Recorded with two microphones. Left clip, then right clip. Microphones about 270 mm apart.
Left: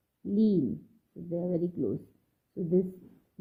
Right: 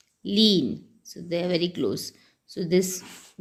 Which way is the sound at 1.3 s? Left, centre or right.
Centre.